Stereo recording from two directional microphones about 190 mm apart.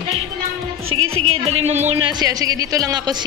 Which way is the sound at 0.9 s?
90° right.